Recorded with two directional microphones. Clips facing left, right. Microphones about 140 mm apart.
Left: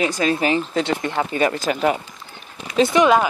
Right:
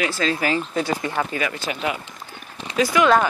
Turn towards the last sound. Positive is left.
turn(degrees=25)  # may be behind; listen again after turning